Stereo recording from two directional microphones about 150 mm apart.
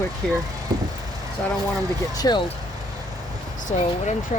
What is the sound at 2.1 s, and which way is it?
Speech, 25° left (ahead or behind).